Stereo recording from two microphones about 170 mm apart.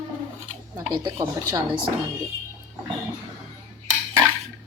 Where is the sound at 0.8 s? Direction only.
25° right (ahead or behind).